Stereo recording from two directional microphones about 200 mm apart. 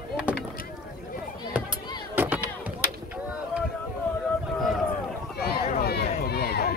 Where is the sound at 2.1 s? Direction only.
10° right (ahead or behind).